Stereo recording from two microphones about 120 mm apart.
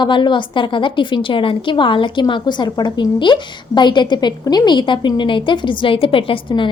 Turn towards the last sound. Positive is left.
turn(degrees=45)  # may be behind; listen again after turning